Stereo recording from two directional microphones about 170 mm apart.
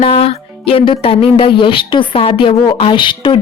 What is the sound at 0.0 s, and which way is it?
Music, 35° left (ahead or behind).